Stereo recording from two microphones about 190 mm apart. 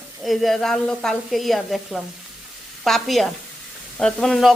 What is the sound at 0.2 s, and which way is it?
Speech, centre (ahead or behind).